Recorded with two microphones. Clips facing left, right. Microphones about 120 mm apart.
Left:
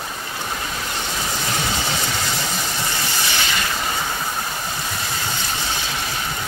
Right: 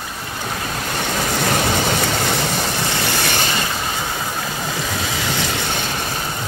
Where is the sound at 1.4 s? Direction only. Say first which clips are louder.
Right 7 dB; 60° right (ahead or behind).